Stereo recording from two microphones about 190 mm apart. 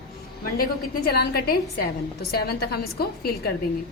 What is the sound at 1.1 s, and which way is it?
A woman's voice, 55° left (ahead or behind).